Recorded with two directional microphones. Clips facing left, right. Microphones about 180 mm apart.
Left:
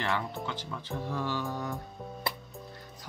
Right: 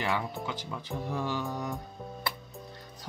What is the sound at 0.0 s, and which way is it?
Speech, 15° right (ahead or behind).